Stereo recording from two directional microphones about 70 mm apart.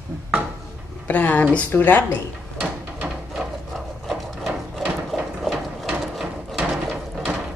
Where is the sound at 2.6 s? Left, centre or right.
Centre.